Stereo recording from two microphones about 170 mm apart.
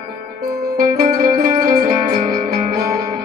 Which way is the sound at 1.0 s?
55° right (ahead or behind).